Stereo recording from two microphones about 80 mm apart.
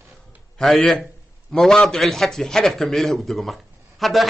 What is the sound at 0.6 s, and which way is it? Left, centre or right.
A man's voice, centre.